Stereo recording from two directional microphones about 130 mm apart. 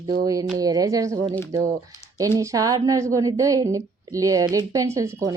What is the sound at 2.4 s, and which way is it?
A woman's voice, 25° right (ahead or behind).